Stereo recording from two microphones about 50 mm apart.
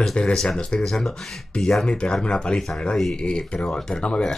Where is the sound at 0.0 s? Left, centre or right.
Centre.